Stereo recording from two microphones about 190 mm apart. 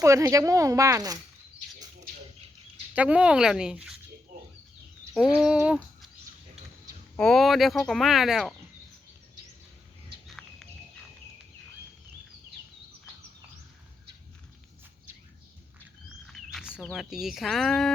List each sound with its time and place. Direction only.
0.0 s speech: 15° right (ahead or behind)
2.9 s speech: 5° right (ahead or behind)
5.4 s a sound: 5° right (ahead or behind)
7.2 s speech: centre (ahead or behind)
10.2 s bird: centre (ahead or behind)
16.2 s speech: centre (ahead or behind)